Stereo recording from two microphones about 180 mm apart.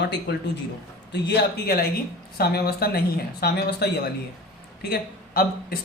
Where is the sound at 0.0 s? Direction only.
70° left (ahead or behind).